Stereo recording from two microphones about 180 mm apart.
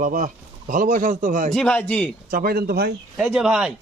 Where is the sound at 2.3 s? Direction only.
55° right (ahead or behind).